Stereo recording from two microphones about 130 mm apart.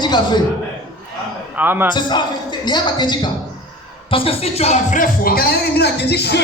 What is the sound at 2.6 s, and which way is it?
Music, 35° left (ahead or behind).